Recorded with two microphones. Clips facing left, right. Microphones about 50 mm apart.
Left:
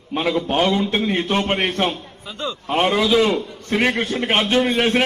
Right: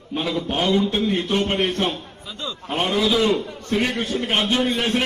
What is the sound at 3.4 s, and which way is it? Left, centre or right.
Speech, right.